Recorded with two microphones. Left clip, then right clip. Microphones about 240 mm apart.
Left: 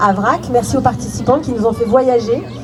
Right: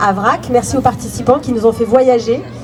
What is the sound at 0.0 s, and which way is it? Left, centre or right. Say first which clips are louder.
Speech: even; right.